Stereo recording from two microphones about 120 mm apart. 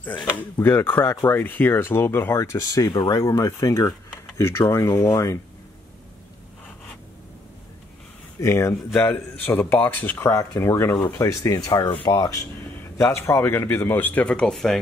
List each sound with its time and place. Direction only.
0.2 s speech: 15° left (ahead or behind)
2.9 s speech: 40° left (ahead or behind)
3.2 s speech: 25° left (ahead or behind)
8.4 s speech: 25° left (ahead or behind); by 14.8 s 5° left (ahead or behind)